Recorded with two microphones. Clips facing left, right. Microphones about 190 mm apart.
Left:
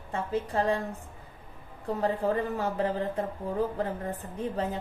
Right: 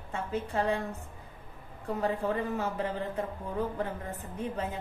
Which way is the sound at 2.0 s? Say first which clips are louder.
Left 3 dB; 35° left (ahead or behind).